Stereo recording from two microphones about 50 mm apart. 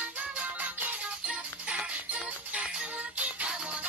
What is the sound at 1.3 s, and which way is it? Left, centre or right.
Music, centre.